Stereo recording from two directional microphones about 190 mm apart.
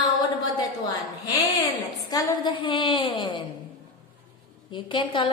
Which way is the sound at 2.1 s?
20° left (ahead or behind).